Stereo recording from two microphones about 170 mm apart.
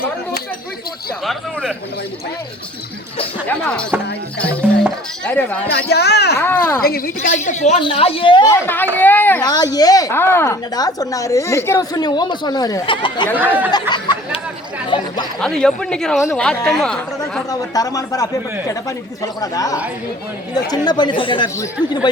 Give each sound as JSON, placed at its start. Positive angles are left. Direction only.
{"t": 1.2, "sound": "speech", "side_deg": 0}
{"t": 3.4, "sound": "speech", "side_deg": 5}
{"t": 5.7, "sound": "speech", "side_deg": 75}
{"t": 6.4, "sound": "speech", "side_deg": 15}
{"t": 6.8, "sound": "a woman's voice", "side_deg": 60}
{"t": 7.8, "sound": "a woman's voice", "side_deg": 30}
{"t": 8.4, "sound": "speech", "side_deg": 10}
{"t": 9.4, "sound": "a woman's voice", "side_deg": 25}
{"t": 13.9, "sound": "chatter", "side_deg": 25}
{"t": 15.4, "sound": "speech", "side_deg": 5}
{"t": 17.5, "sound": "a woman's voice", "side_deg": 20}